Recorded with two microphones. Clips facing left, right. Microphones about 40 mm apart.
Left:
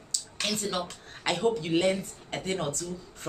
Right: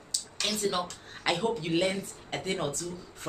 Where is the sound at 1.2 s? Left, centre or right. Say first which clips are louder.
Left 2 dB; centre.